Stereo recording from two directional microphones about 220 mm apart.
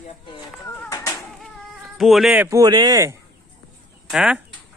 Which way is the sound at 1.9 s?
Centre (ahead or behind).